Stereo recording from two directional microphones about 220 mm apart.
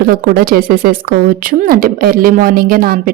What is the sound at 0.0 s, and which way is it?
A woman's voice, 40° right (ahead or behind).